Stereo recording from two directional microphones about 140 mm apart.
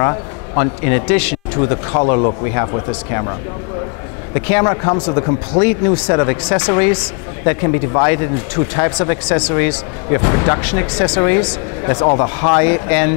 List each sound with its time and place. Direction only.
0.0 s a man's voice: 15° left (ahead or behind)
4.3 s a man's voice: 15° left (ahead or behind)